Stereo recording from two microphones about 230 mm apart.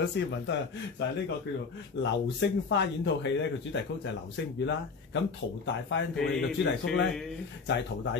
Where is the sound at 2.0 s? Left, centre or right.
Left.